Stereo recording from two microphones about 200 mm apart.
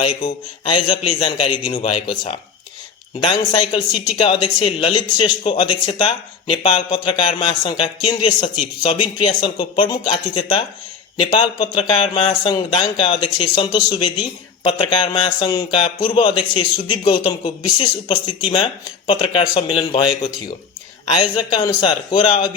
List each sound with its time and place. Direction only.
0.6 s a man's voice: 25° left (ahead or behind)